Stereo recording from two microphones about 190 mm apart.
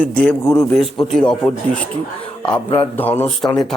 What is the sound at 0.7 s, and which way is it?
A man's voice, centre (ahead or behind).